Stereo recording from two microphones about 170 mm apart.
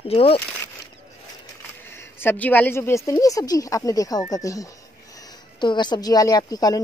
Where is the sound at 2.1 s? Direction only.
10° left (ahead or behind).